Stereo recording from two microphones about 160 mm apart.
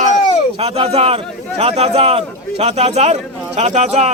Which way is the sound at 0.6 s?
40° right (ahead or behind).